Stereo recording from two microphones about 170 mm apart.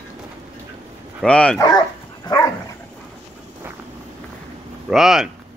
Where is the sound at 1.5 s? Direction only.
20° left (ahead or behind).